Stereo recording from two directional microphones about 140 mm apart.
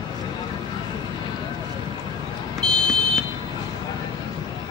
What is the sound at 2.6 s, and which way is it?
Smoke detector, 5° left (ahead or behind).